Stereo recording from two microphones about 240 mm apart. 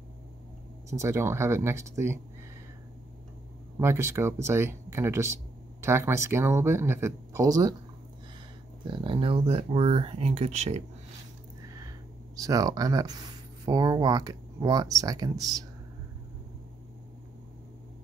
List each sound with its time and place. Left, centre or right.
0.8 s speech: centre
3.8 s speech: centre
8.9 s speech: right
12.4 s speech: centre